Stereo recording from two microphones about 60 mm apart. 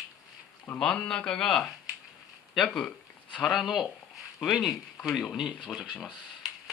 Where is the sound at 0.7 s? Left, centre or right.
Centre.